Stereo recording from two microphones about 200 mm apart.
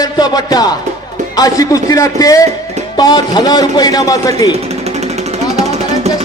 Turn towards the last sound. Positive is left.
turn(degrees=-35)  # may be behind; listen again after turning